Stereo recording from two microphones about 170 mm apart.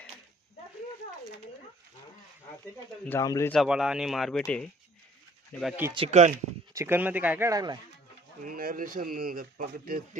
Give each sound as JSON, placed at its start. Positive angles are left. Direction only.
{"t": 3.0, "sound": "speech", "side_deg": 15}
{"t": 3.5, "sound": "speech", "side_deg": 0}
{"t": 5.5, "sound": "speech", "side_deg": 0}
{"t": 6.1, "sound": "speech", "side_deg": -45}
{"t": 6.7, "sound": "speech", "side_deg": -10}
{"t": 8.4, "sound": "speech", "side_deg": -55}